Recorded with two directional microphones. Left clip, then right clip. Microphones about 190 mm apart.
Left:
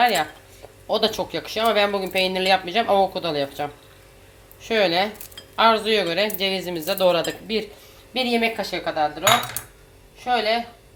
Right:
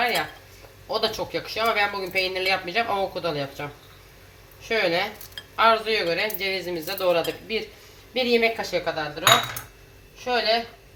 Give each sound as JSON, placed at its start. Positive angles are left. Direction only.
{"t": 0.0, "sound": "speech", "side_deg": 45}
{"t": 4.7, "sound": "speech", "side_deg": 55}
{"t": 10.2, "sound": "speech", "side_deg": 45}